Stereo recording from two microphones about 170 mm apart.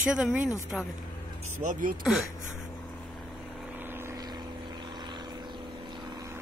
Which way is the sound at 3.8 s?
15° right (ahead or behind).